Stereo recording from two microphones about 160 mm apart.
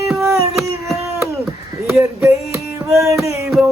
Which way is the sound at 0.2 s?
15° right (ahead or behind).